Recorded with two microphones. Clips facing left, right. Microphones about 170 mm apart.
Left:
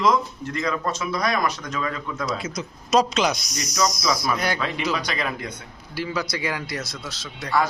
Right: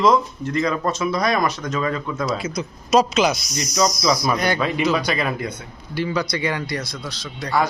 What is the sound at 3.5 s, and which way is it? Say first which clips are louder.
A man's voice: right 3 dB; 20° right (ahead or behind).